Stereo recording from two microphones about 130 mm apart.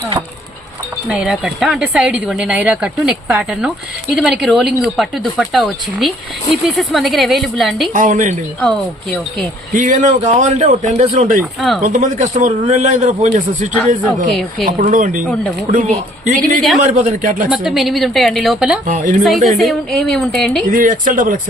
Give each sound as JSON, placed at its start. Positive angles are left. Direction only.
{"t": 1.0, "sound": "a woman's voice", "side_deg": -5}
{"t": 7.9, "sound": "speech", "side_deg": -85}
{"t": 9.7, "sound": "speech", "side_deg": -75}
{"t": 11.1, "sound": "speech", "side_deg": -80}
{"t": 14.8, "sound": "speech", "side_deg": -80}
{"t": 16.4, "sound": "a woman's voice", "side_deg": 0}
{"t": 16.8, "sound": "a man's voice", "side_deg": -90}
{"t": 17.5, "sound": "a woman's voice", "side_deg": 0}
{"t": 18.9, "sound": "speech", "side_deg": -80}
{"t": 19.2, "sound": "a woman's voice", "side_deg": 0}
{"t": 20.7, "sound": "a man's voice", "side_deg": -90}